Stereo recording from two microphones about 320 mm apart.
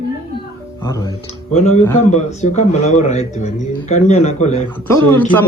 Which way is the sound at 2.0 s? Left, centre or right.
Left.